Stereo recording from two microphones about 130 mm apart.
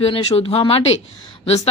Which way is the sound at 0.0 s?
50° left (ahead or behind).